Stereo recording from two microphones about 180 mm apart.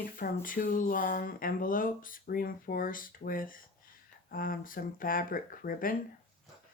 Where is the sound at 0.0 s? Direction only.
50° left (ahead or behind).